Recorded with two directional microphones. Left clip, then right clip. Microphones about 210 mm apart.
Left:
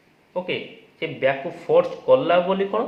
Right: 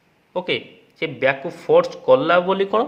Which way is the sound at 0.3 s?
45° right (ahead or behind).